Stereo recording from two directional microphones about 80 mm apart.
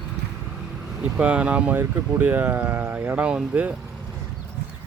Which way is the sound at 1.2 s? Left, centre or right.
Centre.